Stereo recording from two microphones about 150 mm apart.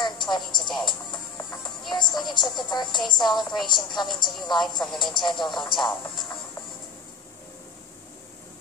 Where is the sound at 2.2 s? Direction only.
30° left (ahead or behind).